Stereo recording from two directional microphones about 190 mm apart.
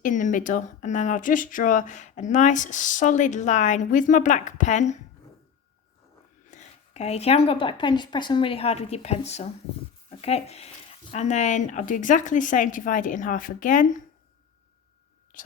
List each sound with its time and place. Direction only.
0.0 s speech: 40° left (ahead or behind)
6.5 s speech: 35° left (ahead or behind)
15.3 s speech: 45° left (ahead or behind)